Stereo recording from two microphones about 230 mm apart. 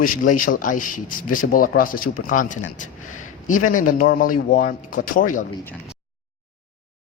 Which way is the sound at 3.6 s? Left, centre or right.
Left.